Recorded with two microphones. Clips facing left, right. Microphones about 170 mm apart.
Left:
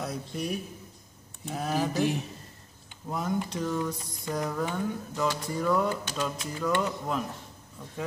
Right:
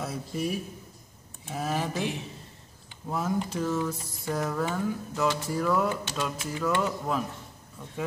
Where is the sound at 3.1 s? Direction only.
5° right (ahead or behind).